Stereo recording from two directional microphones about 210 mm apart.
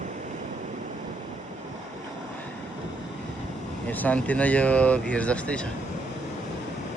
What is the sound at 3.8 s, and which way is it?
Speech, 5° left (ahead or behind).